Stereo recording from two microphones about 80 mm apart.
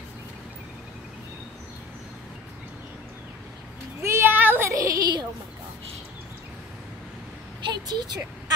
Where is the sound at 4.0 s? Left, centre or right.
Right.